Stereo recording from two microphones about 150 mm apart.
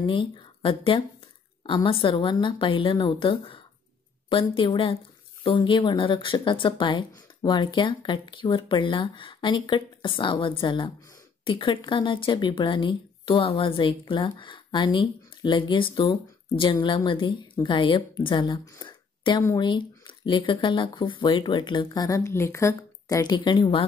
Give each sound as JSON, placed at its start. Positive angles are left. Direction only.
{"t": 0.0, "sound": "speech", "side_deg": 35}